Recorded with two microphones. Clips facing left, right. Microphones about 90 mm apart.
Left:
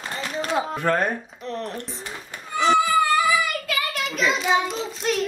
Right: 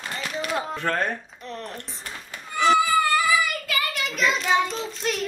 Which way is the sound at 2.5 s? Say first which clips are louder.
Even; centre (ahead or behind).